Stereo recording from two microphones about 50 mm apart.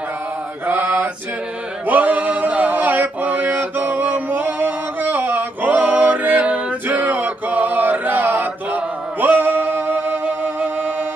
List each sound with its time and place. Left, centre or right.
0.7 s mantra: right
1.9 s male singing: right